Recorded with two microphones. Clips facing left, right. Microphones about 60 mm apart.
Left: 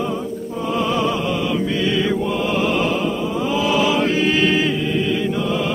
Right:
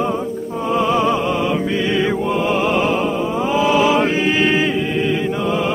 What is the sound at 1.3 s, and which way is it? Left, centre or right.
Music, right.